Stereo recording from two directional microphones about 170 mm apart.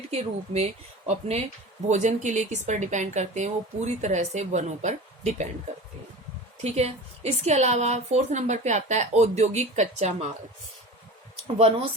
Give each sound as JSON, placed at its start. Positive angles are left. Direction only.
{"t": 0.1, "sound": "a woman's voice", "side_deg": -40}
{"t": 6.6, "sound": "a woman's voice", "side_deg": -40}
{"t": 11.4, "sound": "a woman's voice", "side_deg": -35}